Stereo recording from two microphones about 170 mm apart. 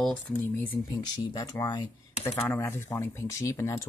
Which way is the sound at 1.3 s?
25° left (ahead or behind).